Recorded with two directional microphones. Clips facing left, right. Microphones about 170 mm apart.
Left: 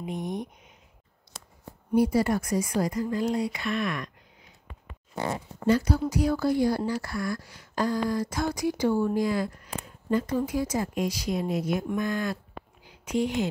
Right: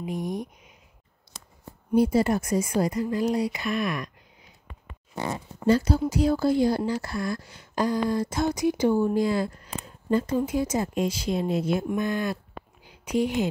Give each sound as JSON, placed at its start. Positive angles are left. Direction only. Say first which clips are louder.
{"t": 0.1, "sound": "speech", "louder": "right 2 dB", "side_deg": 25}
{"t": 2.0, "sound": "speech", "louder": "right 2 dB", "side_deg": -25}
{"t": 5.7, "sound": "speech", "louder": "right 2 dB", "side_deg": -25}
{"t": 13.1, "sound": "speech", "louder": "right 2 dB", "side_deg": 20}